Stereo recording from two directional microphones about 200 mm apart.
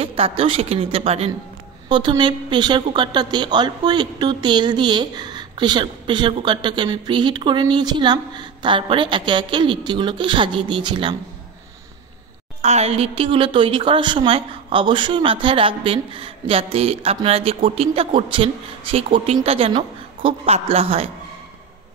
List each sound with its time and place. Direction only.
0.0 s a woman's voice: 30° right (ahead or behind)
12.6 s a woman's voice: 35° right (ahead or behind)